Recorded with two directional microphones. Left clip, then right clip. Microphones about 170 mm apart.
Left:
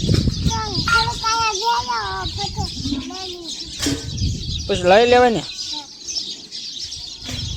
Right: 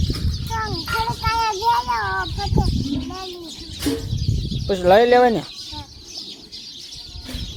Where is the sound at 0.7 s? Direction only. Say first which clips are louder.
Left 9 dB; 25° right (ahead or behind).